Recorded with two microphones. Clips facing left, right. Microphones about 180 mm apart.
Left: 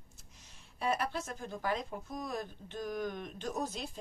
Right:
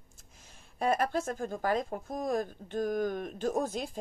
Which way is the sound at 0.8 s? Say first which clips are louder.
Right 5 dB; 50° right (ahead or behind).